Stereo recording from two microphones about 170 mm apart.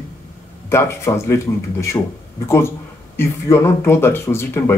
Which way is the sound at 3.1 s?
15° left (ahead or behind).